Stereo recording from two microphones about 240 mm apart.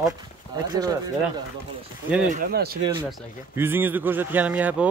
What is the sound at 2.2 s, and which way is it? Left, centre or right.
Speech, right.